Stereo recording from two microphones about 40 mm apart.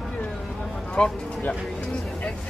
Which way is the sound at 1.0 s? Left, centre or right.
Left.